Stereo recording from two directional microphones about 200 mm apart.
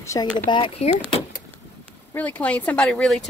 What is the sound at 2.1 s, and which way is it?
Speech, 10° left (ahead or behind).